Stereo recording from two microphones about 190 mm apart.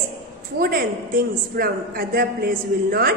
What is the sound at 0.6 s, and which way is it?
A man's voice, 50° right (ahead or behind).